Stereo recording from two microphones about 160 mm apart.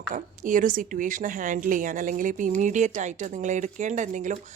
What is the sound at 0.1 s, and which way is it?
A woman's voice, 55° right (ahead or behind).